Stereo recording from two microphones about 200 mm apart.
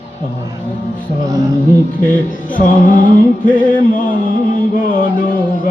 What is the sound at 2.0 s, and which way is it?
Music, 40° left (ahead or behind).